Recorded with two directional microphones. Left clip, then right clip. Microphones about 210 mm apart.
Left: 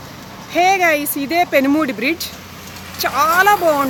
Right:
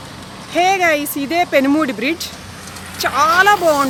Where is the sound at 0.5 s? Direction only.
Centre (ahead or behind).